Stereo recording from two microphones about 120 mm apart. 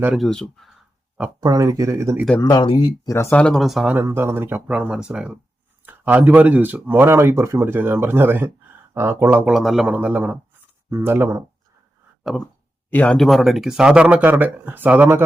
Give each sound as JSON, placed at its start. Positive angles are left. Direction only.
{"t": 0.1, "sound": "speech", "side_deg": 0}
{"t": 1.4, "sound": "speech", "side_deg": -30}
{"t": 2.4, "sound": "speech", "side_deg": 30}
{"t": 2.6, "sound": "speech", "side_deg": 45}
{"t": 3.1, "sound": "speech", "side_deg": 25}
{"t": 3.3, "sound": "speech", "side_deg": 5}
{"t": 3.9, "sound": "speech", "side_deg": -20}
{"t": 9.5, "sound": "speech", "side_deg": -5}
{"t": 12.2, "sound": "a sound", "side_deg": 0}
{"t": 12.9, "sound": "speech", "side_deg": 10}